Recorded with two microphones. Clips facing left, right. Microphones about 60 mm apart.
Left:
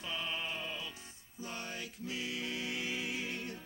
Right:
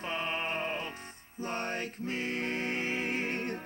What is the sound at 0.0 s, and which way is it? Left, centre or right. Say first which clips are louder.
Music: right 6 dB; right.